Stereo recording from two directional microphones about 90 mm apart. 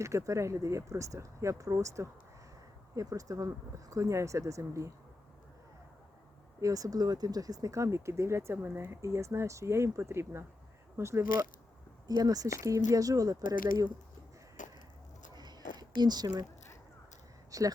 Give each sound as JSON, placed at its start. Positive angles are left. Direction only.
{"t": 0.0, "sound": "speech", "side_deg": -35}
{"t": 6.6, "sound": "speech", "side_deg": -40}
{"t": 9.0, "sound": "speech", "side_deg": -35}
{"t": 12.0, "sound": "speech", "side_deg": -45}
{"t": 15.4, "sound": "a sound", "side_deg": -50}
{"t": 17.5, "sound": "speech", "side_deg": -40}